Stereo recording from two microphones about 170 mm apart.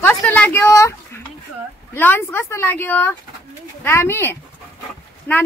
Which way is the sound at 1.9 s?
10° left (ahead or behind).